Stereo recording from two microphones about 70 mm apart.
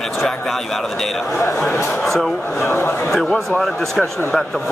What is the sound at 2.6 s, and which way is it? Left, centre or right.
Speech, left.